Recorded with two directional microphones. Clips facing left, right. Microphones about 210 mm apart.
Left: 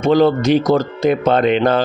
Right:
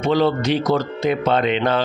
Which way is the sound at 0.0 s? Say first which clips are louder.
Left 5 dB; 45° left (ahead or behind).